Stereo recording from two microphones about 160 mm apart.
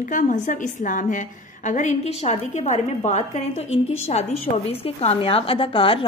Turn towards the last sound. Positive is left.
turn(degrees=35)  # may be behind; listen again after turning